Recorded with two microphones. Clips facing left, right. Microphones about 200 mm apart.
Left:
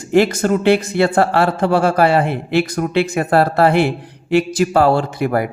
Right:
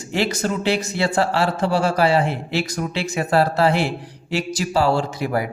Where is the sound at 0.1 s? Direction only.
50° left (ahead or behind).